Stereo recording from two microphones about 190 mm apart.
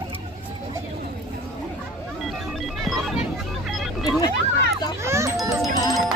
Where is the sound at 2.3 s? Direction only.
Centre (ahead or behind).